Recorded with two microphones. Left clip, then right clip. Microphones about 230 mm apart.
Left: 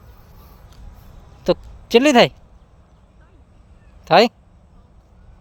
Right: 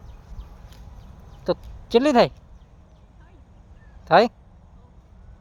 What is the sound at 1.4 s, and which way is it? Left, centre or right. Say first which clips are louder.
Speech: left 6 dB; left.